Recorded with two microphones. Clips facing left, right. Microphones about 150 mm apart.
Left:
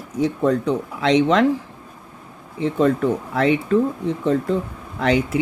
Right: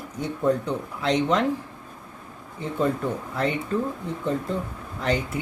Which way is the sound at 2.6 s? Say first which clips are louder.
Left 7 dB; 90° left.